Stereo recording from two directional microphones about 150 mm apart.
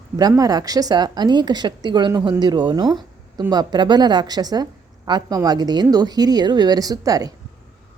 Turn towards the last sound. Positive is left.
turn(degrees=-25)  # may be behind; listen again after turning